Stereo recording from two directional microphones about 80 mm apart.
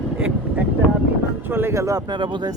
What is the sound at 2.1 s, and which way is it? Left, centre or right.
Speech, right.